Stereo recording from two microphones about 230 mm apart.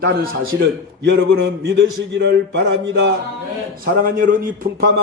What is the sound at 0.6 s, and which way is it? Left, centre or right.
A man's voice, right.